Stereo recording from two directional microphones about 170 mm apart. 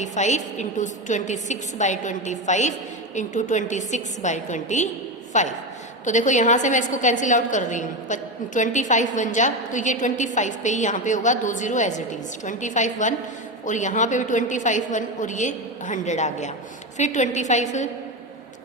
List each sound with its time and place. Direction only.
0.0 s a woman's voice: 45° left (ahead or behind)